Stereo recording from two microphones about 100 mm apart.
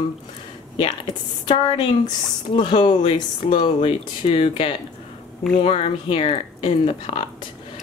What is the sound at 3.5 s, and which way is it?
Speech, 65° left (ahead or behind).